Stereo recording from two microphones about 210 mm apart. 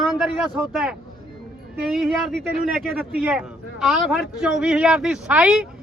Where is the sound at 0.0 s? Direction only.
Centre (ahead or behind).